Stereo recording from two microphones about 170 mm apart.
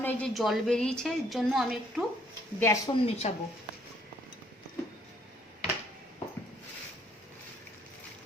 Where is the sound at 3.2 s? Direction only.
40° left (ahead or behind).